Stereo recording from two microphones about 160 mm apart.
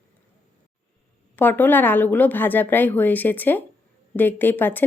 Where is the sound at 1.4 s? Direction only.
10° left (ahead or behind).